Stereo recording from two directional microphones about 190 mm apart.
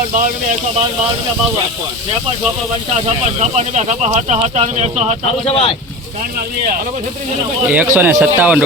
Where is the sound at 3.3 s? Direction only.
35° right (ahead or behind).